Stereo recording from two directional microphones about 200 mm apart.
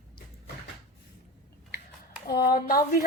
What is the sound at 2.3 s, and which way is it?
Speech, 50° left (ahead or behind).